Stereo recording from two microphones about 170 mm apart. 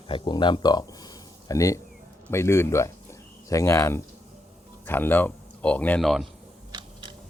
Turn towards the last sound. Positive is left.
turn(degrees=-30)  # may be behind; listen again after turning